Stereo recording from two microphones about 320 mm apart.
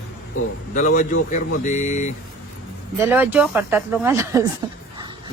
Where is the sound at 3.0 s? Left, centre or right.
Centre.